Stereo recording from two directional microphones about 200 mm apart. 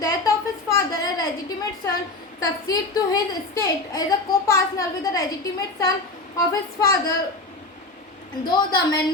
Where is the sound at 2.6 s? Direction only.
20° left (ahead or behind).